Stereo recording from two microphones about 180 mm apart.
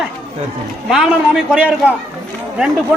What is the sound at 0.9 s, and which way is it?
Speech, 5° right (ahead or behind).